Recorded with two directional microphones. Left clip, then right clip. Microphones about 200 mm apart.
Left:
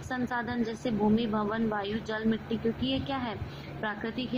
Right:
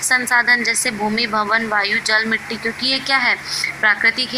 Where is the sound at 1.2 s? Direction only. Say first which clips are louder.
Right 14 dB; 15° right (ahead or behind).